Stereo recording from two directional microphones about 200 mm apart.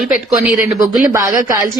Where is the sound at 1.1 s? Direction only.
15° right (ahead or behind).